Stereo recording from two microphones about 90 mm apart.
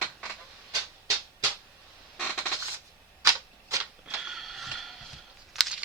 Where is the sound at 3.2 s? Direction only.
35° right (ahead or behind).